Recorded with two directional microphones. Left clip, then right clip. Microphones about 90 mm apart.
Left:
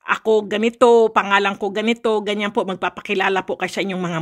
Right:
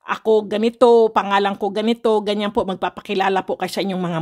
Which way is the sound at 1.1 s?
5° right (ahead or behind).